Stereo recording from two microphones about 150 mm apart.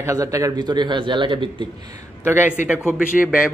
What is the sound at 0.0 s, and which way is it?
A man's voice, 20° right (ahead or behind).